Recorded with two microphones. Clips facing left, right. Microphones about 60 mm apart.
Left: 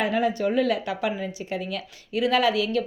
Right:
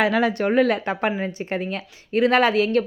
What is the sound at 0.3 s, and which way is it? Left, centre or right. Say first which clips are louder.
Speech: right 4 dB; right.